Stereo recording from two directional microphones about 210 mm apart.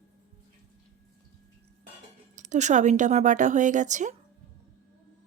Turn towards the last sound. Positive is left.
turn(degrees=-35)  # may be behind; listen again after turning